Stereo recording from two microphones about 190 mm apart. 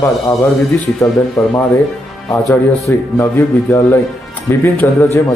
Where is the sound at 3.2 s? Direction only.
10° left (ahead or behind).